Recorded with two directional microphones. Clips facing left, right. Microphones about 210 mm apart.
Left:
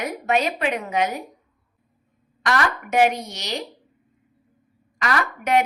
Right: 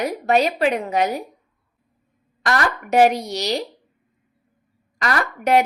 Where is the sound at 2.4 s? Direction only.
35° right (ahead or behind).